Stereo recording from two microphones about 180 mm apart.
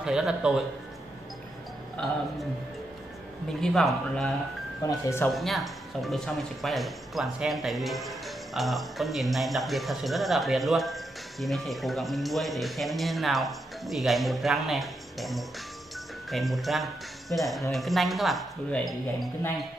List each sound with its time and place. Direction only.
0.0 s speech: 5° right (ahead or behind)
3.6 s speech: centre (ahead or behind)
4.8 s speech: 15° left (ahead or behind)
5.3 s speech: centre (ahead or behind)